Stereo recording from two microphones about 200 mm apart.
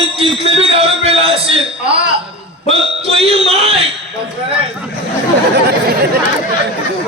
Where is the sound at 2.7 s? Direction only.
30° right (ahead or behind).